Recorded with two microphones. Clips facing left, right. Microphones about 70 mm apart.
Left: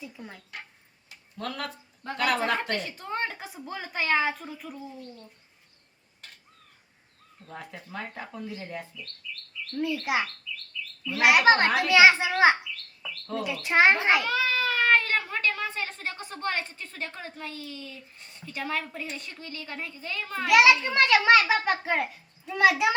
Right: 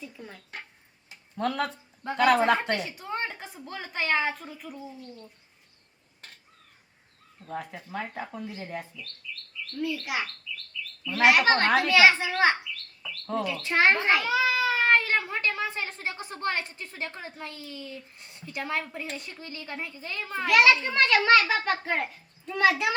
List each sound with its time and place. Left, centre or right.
0.0 s a woman's voice: centre
1.4 s a woman's voice: right
2.7 s a woman's voice: centre
7.4 s a woman's voice: centre
9.7 s a child's voice: left
14.3 s a sound: centre
16.0 s a woman's voice: centre
20.5 s a child's voice: centre